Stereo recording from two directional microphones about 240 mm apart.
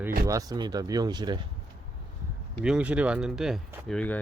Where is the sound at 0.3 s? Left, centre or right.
Centre.